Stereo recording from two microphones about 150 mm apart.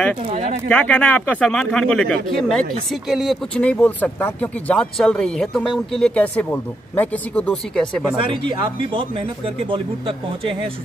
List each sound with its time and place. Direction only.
0.3 s speech: 45° right (ahead or behind)
0.7 s speech: 10° left (ahead or behind)
8.3 s speech: 35° right (ahead or behind)